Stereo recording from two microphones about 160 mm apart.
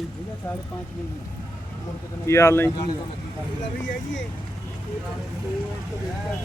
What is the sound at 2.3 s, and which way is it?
Speech, 15° left (ahead or behind).